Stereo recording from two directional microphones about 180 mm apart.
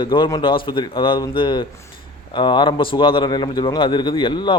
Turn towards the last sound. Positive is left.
turn(degrees=25)  # may be behind; listen again after turning